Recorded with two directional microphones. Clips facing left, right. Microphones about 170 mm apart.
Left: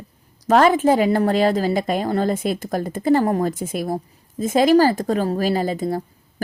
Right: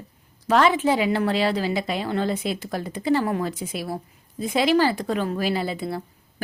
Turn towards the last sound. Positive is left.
turn(degrees=40)  # may be behind; listen again after turning